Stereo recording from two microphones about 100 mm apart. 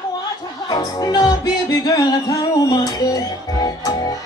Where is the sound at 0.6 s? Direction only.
40° left (ahead or behind).